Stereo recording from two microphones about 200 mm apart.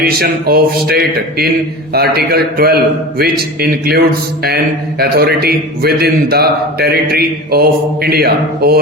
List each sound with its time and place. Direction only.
0.0 s a man's voice: 50° right (ahead or behind)